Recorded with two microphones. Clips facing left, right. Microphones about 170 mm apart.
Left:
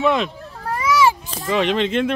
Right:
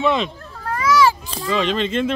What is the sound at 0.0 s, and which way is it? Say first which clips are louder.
Speech: left 1 dB; 5° left (ahead or behind).